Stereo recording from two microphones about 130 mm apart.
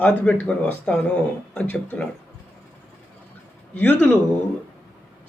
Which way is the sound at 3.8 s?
10° left (ahead or behind).